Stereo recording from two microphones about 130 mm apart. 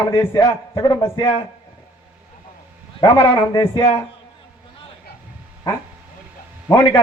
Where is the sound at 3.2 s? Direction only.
40° left (ahead or behind).